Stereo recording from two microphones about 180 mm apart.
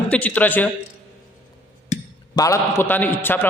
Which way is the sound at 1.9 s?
40° left (ahead or behind).